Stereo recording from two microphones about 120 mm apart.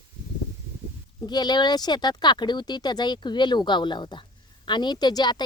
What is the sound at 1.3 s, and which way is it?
Speech, 35° left (ahead or behind).